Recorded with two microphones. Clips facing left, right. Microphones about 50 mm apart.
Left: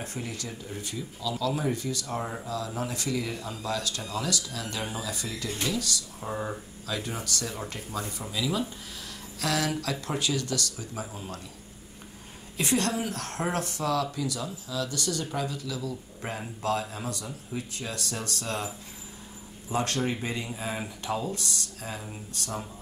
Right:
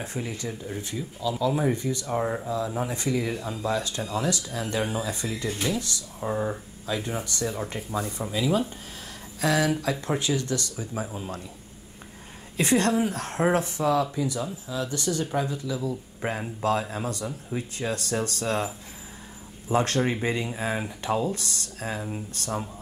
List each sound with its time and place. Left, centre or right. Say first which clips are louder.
0.0 s speech: right 4 dB; right
5.5 s speech: right 2 dB; centre
5.8 s speech: right 1 dB; right
6.3 s speech: right 4 dB; centre
6.9 s speech: right 3 dB; right
12.5 s speech: right 5 dB; right
19.7 s speech: right 5 dB; right